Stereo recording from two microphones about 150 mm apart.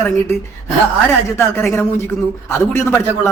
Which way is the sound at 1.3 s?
15° left (ahead or behind).